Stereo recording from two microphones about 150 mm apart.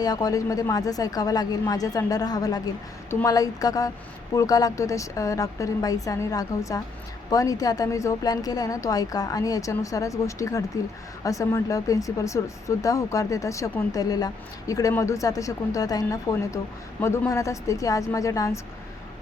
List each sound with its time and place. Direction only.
0.0 s speech: 25° left (ahead or behind)